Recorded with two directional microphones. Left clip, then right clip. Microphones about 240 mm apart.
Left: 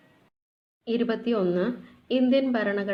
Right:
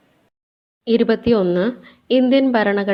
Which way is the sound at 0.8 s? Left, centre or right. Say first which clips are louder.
Right 11 dB; right.